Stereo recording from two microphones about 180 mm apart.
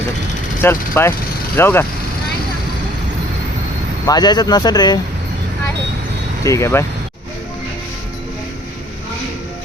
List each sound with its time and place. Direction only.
0.6 s speech: 15° left (ahead or behind)
4.0 s speech: 20° left (ahead or behind)
6.4 s speech: 15° left (ahead or behind)